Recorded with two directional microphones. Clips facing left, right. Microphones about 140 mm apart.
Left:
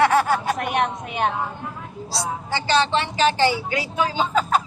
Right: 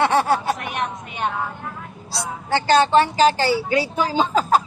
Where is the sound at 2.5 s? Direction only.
45° right (ahead or behind).